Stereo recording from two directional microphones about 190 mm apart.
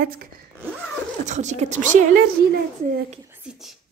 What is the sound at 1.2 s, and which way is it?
Speech, 40° right (ahead or behind).